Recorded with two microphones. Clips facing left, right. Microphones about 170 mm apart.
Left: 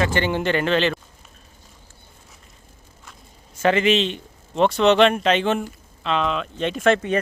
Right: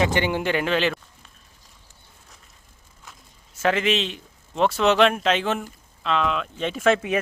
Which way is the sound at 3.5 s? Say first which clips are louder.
Left 4 dB; centre (ahead or behind).